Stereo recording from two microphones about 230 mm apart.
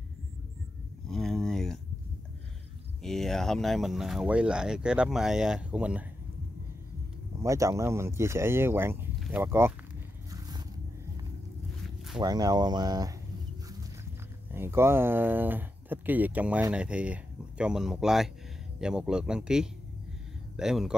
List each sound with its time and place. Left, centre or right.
1.0 s a sound: centre
3.0 s speech: centre
7.4 s speech: centre
12.2 s speech: centre
14.5 s speech: centre